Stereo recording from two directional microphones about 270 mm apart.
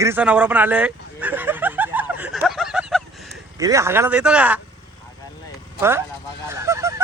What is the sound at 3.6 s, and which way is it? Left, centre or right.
Speech, centre.